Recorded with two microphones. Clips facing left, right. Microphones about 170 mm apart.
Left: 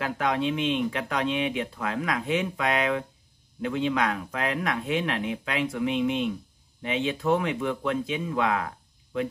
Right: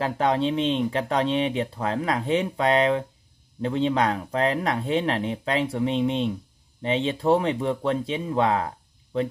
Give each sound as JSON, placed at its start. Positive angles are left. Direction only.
{"t": 0.0, "sound": "speech", "side_deg": -30}